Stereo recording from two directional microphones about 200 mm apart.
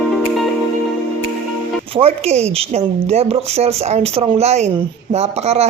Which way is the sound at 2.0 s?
30° right (ahead or behind).